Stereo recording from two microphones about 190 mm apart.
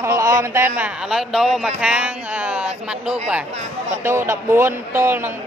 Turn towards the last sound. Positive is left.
turn(degrees=-10)  # may be behind; listen again after turning